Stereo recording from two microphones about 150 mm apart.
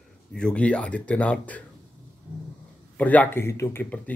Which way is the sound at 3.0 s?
10° left (ahead or behind).